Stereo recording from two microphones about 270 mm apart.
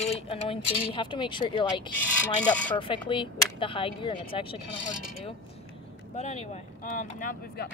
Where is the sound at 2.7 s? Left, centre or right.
Centre.